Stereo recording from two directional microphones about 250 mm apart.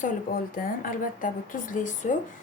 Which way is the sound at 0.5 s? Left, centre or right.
Left.